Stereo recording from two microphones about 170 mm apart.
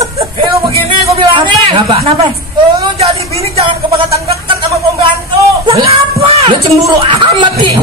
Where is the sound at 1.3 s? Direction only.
30° right (ahead or behind).